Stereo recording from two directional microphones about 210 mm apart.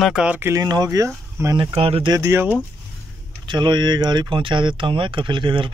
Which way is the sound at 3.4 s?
20° right (ahead or behind).